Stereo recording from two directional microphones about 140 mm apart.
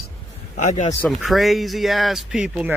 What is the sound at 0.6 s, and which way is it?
Speech, 60° left (ahead or behind).